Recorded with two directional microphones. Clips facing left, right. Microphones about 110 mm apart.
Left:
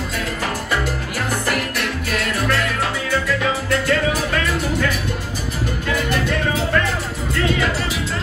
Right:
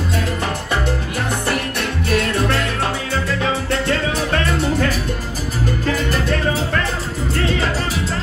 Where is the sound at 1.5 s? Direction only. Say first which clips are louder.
Right 1 dB; 30° right (ahead or behind).